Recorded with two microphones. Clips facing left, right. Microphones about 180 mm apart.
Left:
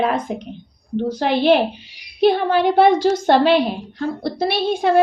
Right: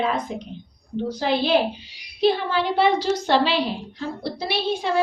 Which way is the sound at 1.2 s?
65° left (ahead or behind).